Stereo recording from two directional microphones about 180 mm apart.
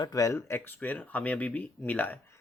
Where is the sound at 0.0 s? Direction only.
20° left (ahead or behind).